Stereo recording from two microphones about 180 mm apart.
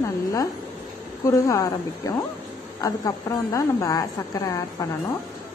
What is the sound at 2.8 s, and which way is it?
A woman's voice, 20° left (ahead or behind).